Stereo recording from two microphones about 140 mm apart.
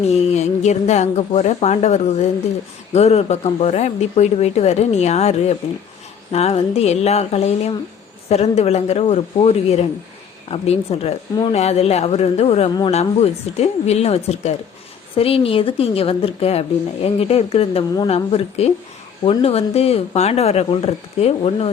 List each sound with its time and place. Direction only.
0.1 s a woman's voice: 50° left (ahead or behind)